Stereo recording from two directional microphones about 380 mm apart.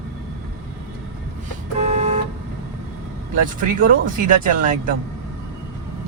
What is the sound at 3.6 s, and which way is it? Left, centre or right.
Speech, right.